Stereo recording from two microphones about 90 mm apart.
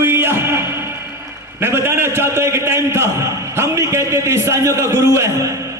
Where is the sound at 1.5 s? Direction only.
25° right (ahead or behind).